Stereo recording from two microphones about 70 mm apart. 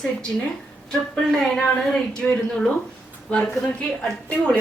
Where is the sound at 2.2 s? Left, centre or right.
Centre.